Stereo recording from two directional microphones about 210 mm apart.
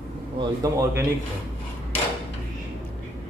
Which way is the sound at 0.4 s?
15° right (ahead or behind).